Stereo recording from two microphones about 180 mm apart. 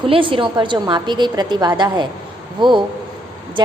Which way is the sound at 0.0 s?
30° right (ahead or behind).